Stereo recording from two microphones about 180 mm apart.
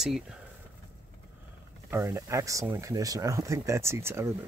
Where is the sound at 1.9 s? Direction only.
15° right (ahead or behind).